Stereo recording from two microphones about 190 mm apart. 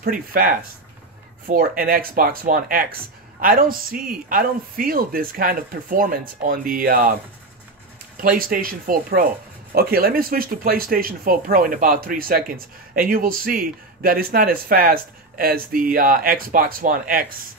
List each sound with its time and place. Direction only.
0.0 s speech: 50° right (ahead or behind)
8.2 s speech: 45° right (ahead or behind)